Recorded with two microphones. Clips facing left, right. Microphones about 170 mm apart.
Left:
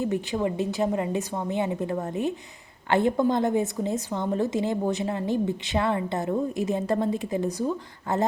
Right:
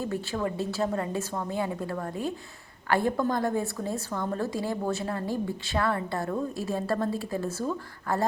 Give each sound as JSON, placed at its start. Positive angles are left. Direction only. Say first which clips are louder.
{"t": 0.0, "sound": "a woman's voice", "louder": "left 4 dB", "side_deg": 20}